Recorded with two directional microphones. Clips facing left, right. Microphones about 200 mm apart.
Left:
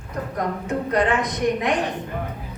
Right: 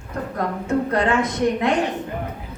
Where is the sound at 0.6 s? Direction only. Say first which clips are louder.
Right 2 dB; 20° left (ahead or behind).